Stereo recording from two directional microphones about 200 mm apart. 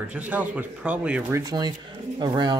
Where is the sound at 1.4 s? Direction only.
20° right (ahead or behind).